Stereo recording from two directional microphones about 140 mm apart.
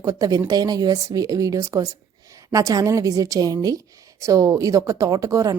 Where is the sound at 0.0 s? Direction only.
25° right (ahead or behind).